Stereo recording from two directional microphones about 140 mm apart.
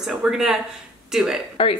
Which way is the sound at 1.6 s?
40° left (ahead or behind).